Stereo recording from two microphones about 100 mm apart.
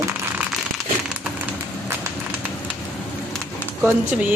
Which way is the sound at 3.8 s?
15° right (ahead or behind).